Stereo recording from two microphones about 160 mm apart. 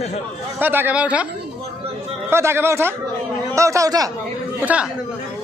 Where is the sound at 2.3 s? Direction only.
15° right (ahead or behind).